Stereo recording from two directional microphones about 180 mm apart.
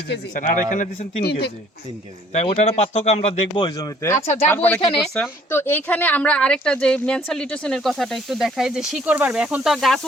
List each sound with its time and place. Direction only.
0.3 s a man's voice: 45° left (ahead or behind)
1.3 s speech: 65° left (ahead or behind)
2.3 s speech: 40° left (ahead or behind)
3.7 s speech: 20° left (ahead or behind); by 10.1 s centre (ahead or behind)